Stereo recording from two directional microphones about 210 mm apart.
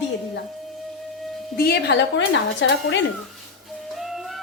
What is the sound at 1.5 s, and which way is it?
Speech, 50° left (ahead or behind).